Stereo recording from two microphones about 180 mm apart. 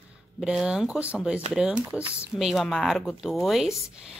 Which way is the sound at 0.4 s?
5° right (ahead or behind).